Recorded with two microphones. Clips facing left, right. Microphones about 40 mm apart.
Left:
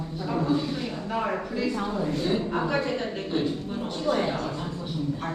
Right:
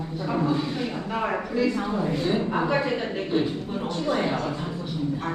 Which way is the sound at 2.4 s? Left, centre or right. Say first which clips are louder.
Right 2 dB; centre.